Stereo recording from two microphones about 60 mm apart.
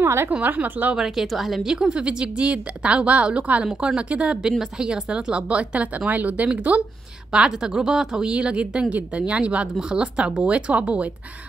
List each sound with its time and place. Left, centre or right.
0.0 s a sound: right
0.3 s speech: right
0.9 s a woman's voice: centre; by 6.8 s right
7.3 s a woman's voice: centre